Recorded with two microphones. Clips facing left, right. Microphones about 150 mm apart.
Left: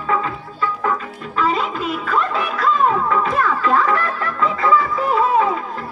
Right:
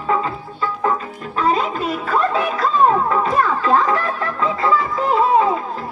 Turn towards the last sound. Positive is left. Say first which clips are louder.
# right 1 dB
turn(degrees=-30)  # may be behind; listen again after turning